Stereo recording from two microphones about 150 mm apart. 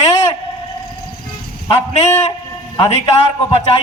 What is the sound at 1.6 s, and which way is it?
Speech, 30° left (ahead or behind).